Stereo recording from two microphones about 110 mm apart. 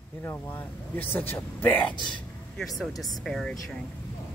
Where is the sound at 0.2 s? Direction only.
20° left (ahead or behind).